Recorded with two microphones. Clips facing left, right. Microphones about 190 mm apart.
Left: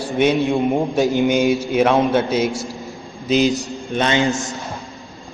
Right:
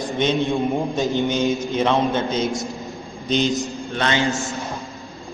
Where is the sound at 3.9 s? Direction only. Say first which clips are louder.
Left 4 dB; 20° left (ahead or behind).